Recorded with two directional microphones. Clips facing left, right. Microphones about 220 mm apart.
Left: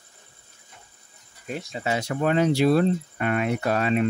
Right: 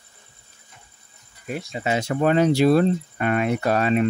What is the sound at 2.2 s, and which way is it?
Speech, 40° right (ahead or behind).